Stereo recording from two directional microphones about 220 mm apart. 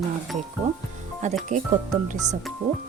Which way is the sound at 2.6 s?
25° right (ahead or behind).